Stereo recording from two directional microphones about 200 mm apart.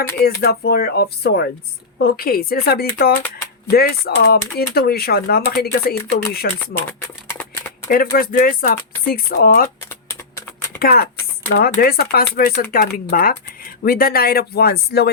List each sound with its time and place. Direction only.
0.4 s speech: 50° left (ahead or behind)
7.3 s a sound: 15° left (ahead or behind)
7.9 s speech: 45° left (ahead or behind)
10.8 s speech: 50° left (ahead or behind)